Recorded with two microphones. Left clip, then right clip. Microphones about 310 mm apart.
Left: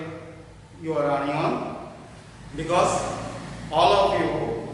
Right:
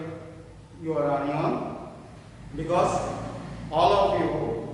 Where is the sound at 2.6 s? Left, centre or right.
Centre.